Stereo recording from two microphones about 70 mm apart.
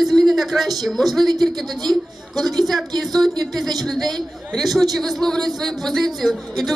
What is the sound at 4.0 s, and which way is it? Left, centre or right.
A man's voice, centre.